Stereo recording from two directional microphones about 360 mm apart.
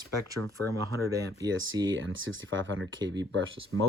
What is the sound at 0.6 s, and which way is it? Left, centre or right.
Speech, centre.